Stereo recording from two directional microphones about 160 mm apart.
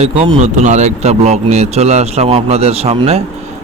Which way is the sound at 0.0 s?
40° right (ahead or behind).